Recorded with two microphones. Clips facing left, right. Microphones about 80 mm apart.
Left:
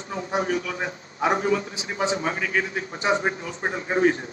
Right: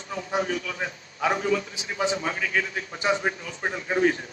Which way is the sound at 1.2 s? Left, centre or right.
Left.